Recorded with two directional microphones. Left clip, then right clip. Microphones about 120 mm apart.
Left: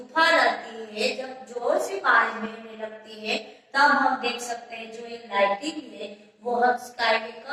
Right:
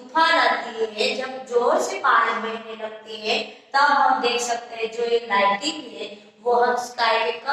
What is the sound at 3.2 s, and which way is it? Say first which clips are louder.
A woman's voice: right 5 dB; 20° right (ahead or behind).